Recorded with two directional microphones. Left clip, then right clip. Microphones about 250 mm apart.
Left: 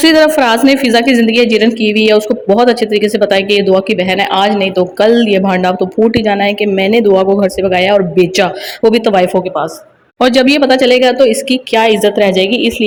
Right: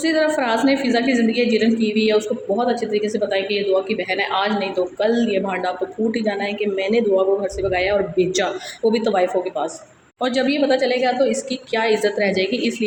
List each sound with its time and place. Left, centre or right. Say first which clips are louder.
0.0 s a woman's voice: left 11 dB; left